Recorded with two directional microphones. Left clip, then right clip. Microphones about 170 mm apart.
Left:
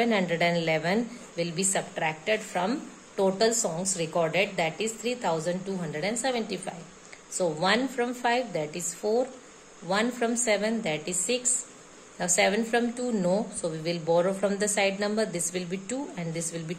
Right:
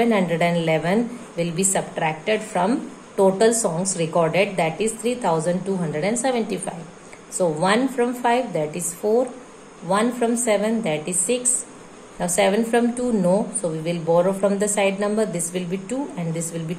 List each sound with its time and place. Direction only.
0.0 s a woman's voice: 20° left (ahead or behind)